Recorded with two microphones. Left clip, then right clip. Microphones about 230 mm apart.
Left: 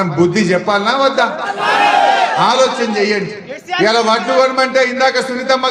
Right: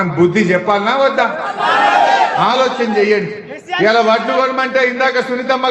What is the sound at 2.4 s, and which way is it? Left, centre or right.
A man's voice, left.